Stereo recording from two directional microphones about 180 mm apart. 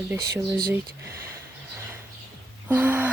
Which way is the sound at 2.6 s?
10° right (ahead or behind).